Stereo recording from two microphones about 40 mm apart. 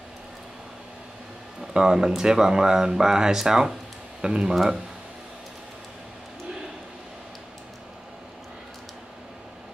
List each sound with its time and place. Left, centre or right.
1.7 s speech: centre